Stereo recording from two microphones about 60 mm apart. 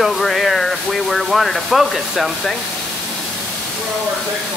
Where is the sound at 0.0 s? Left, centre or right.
Centre.